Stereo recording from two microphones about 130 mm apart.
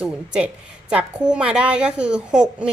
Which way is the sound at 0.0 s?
5° right (ahead or behind).